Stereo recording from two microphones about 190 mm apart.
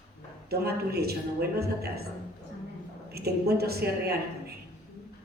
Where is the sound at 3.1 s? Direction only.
55° right (ahead or behind).